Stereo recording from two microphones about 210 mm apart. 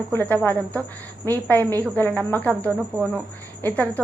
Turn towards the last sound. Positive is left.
turn(degrees=10)  # may be behind; listen again after turning